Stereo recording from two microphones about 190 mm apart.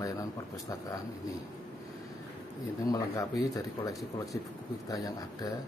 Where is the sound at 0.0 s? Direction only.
15° left (ahead or behind).